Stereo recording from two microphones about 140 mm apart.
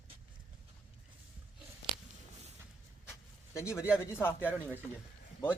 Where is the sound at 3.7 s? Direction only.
5° right (ahead or behind).